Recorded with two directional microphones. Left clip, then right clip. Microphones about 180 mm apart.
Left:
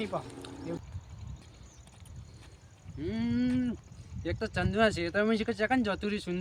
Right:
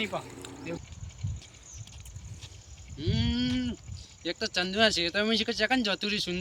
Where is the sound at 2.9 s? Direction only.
20° left (ahead or behind).